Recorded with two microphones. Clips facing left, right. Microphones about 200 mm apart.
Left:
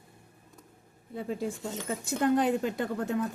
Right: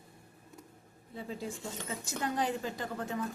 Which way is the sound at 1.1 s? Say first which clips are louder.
Left 6 dB; 55° left (ahead or behind).